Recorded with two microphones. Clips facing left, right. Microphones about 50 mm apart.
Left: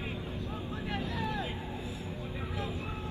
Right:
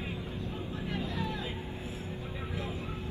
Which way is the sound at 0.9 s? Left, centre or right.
Left.